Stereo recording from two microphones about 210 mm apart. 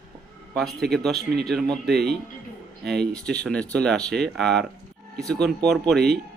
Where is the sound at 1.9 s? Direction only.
50° right (ahead or behind).